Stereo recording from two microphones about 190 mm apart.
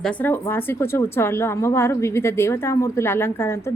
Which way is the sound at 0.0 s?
5° left (ahead or behind).